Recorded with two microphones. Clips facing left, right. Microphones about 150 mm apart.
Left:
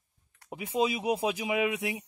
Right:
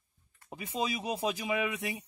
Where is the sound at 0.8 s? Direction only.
15° left (ahead or behind).